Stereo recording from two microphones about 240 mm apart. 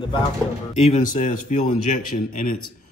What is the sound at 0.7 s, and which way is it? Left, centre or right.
A man's voice, left.